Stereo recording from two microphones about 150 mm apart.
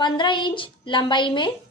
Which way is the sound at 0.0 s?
30° left (ahead or behind).